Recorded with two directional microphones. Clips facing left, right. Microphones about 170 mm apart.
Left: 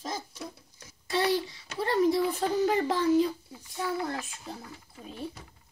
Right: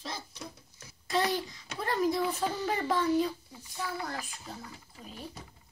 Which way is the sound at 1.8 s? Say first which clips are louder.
Left 4 dB; 25° left (ahead or behind).